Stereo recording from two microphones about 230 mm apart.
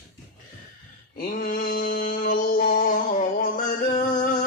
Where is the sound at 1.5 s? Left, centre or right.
Left.